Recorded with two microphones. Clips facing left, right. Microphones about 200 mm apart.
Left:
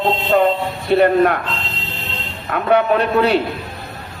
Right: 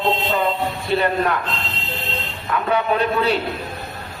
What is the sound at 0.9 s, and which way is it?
Speech, 60° left (ahead or behind).